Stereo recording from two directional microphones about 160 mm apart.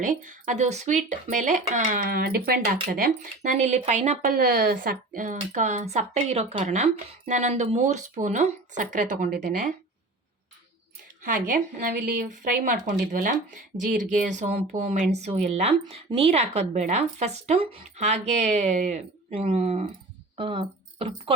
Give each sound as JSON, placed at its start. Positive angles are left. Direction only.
{"t": 0.0, "sound": "speech", "side_deg": -50}
{"t": 2.9, "sound": "speech", "side_deg": -55}
{"t": 4.2, "sound": "speech", "side_deg": -75}
{"t": 11.2, "sound": "speech", "side_deg": -60}